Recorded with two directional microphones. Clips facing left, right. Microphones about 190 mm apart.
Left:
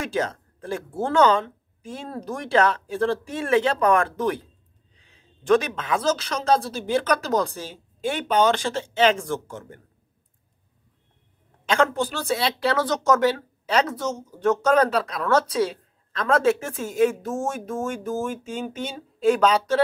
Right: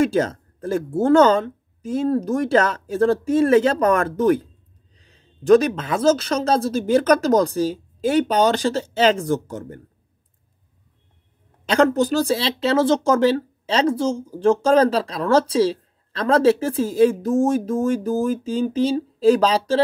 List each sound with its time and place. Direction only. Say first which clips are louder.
0.0 s speech: right 8 dB; 40° right (ahead or behind)
11.6 s speech: right 5 dB; 40° right (ahead or behind)